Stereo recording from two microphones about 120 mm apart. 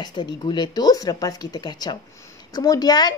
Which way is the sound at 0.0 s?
35° left (ahead or behind).